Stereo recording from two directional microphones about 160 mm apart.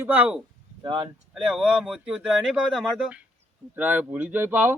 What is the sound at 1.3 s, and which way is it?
Speech, centre (ahead or behind).